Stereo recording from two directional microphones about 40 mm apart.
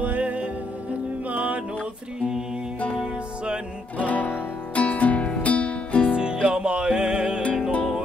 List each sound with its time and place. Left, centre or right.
0.0 s music: right
4.0 s guitar: left
4.7 s music: left
6.4 s music: right